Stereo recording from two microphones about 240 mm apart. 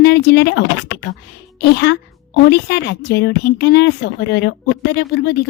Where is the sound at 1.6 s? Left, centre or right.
Left.